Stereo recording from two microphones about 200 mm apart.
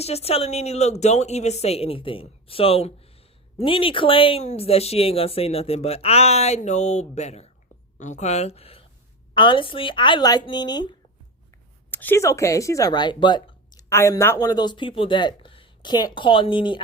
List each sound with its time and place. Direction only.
0.0 s speech: 30° left (ahead or behind)
11.9 s speech: 10° left (ahead or behind); by 16.8 s 25° left (ahead or behind)